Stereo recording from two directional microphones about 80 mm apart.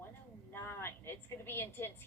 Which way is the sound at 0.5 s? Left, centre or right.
Left.